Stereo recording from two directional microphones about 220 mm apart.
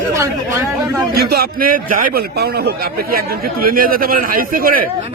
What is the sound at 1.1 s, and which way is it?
A man's voice, 45° right (ahead or behind).